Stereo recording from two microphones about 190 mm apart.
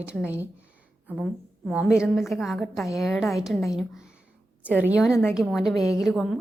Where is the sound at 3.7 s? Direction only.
5° right (ahead or behind).